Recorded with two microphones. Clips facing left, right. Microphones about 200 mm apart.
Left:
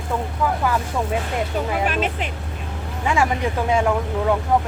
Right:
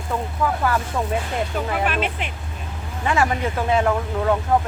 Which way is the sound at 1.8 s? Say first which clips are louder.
Left 1 dB; 40° left (ahead or behind).